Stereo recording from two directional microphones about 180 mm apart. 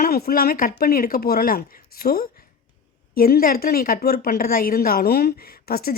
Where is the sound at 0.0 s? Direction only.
55° left (ahead or behind).